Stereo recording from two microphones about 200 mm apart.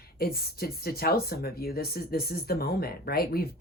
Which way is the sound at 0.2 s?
50° left (ahead or behind).